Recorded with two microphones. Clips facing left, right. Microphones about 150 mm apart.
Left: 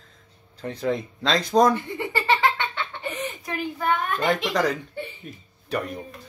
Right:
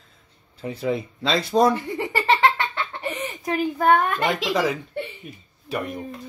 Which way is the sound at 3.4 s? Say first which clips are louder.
Right 7 dB; 45° right (ahead or behind).